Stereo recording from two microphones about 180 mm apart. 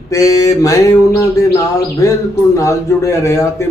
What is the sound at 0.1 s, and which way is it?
Mantra, 20° left (ahead or behind).